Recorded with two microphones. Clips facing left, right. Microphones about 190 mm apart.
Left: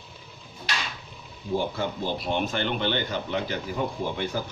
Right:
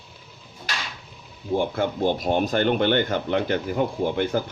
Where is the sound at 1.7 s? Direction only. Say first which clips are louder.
Right 6 dB; 55° right (ahead or behind).